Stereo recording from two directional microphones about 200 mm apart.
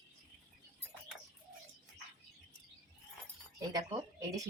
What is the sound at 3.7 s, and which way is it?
Speech, 20° right (ahead or behind).